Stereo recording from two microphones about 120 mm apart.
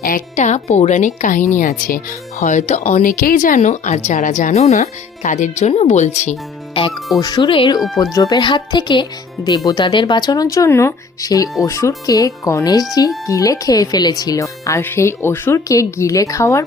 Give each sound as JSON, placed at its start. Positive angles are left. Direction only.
{"t": 0.3, "sound": "a woman's voice", "side_deg": 75}
{"t": 4.1, "sound": "speech", "side_deg": 90}
{"t": 6.8, "sound": "speech", "side_deg": 45}
{"t": 8.1, "sound": "speech", "side_deg": 30}